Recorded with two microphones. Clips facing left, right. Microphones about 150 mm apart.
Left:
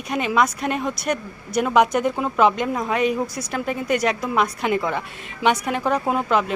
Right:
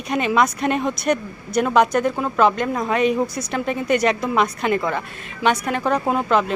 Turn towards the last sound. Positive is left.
turn(degrees=10)  # may be behind; listen again after turning